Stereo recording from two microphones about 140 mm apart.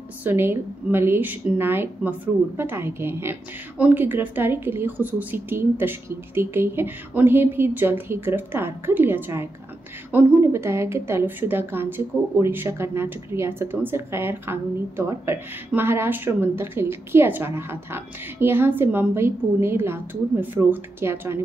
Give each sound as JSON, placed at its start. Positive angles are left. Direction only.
{"t": 0.2, "sound": "a woman's voice", "side_deg": -15}